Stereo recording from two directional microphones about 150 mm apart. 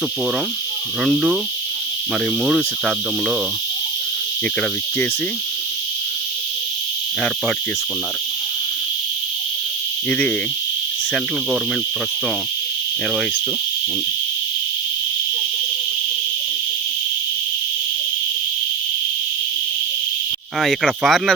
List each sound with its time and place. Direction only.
1.0 s cricket: 5° right (ahead or behind)
2.4 s cricket: centre (ahead or behind)
10.1 s speech: 5° left (ahead or behind)
20.6 s cricket: centre (ahead or behind)